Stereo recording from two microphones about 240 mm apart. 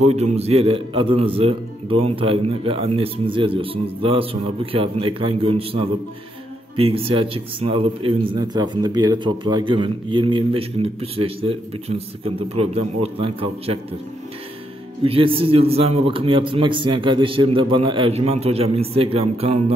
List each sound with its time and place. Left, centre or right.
0.0 s a man's voice: right
15.0 s a man's voice: right